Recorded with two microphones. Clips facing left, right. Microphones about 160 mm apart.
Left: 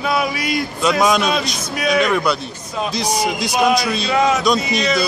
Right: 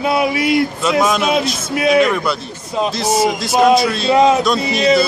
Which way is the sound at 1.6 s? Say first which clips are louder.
Right 6 dB; 25° right (ahead or behind).